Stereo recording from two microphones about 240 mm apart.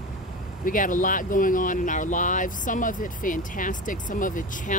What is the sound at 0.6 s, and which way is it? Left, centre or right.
Speech, left.